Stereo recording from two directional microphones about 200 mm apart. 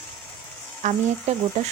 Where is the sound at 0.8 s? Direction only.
35° right (ahead or behind).